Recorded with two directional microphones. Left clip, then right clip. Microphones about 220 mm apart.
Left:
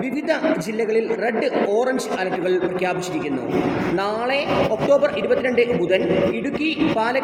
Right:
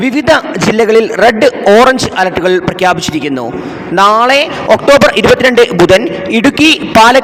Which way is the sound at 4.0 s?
45° right (ahead or behind).